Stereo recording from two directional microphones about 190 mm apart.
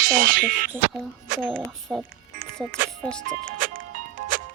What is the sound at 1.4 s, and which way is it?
Speech, 5° left (ahead or behind).